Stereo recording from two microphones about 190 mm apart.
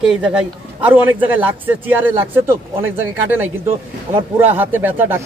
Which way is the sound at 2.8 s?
10° right (ahead or behind).